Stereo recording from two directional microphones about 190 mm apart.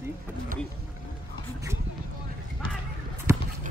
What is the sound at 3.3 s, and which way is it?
Boat, 15° right (ahead or behind).